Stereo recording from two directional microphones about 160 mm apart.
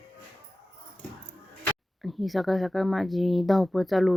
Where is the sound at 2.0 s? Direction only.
Centre (ahead or behind).